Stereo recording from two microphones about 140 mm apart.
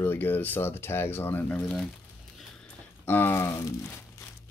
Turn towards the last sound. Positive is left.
turn(degrees=20)  # may be behind; listen again after turning